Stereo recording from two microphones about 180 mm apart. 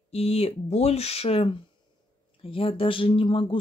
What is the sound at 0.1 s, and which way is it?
Speech, 35° left (ahead or behind).